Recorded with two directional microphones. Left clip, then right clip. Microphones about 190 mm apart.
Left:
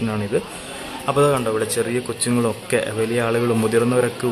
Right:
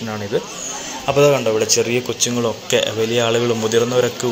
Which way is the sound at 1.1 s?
5° left (ahead or behind).